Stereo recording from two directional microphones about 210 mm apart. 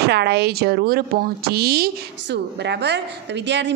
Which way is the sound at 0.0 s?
50° right (ahead or behind).